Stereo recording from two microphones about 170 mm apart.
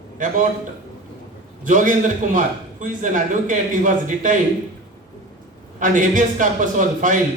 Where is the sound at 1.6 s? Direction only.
50° right (ahead or behind).